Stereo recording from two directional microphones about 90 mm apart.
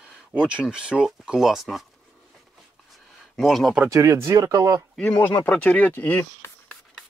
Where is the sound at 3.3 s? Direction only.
5° left (ahead or behind).